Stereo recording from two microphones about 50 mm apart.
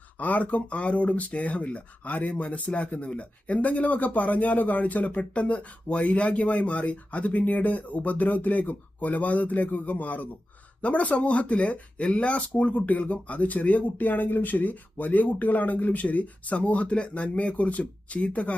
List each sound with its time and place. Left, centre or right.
0.2 s speech: left